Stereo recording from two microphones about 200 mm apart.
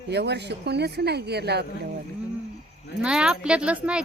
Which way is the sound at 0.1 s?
55° right (ahead or behind).